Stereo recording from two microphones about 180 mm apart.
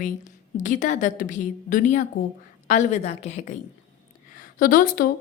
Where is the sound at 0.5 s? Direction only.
45° left (ahead or behind).